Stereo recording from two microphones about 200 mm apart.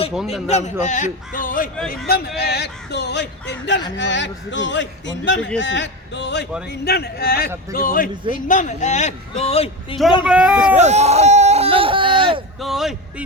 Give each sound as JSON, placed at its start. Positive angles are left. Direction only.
{"t": 0.4, "sound": "a man's voice", "side_deg": 35}
{"t": 10.2, "sound": "speech", "side_deg": -5}
{"t": 10.8, "sound": "a sound", "side_deg": -35}
{"t": 12.5, "sound": "a man's voice", "side_deg": 0}